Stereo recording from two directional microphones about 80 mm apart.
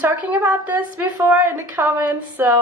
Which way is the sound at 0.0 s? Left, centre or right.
Centre.